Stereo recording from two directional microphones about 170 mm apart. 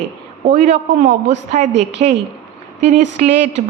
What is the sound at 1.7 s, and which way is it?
Speech, 90° right.